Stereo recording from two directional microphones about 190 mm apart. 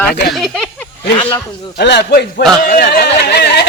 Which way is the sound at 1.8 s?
60° left (ahead or behind).